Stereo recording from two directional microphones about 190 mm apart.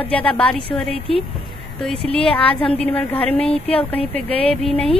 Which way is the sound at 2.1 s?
5° left (ahead or behind).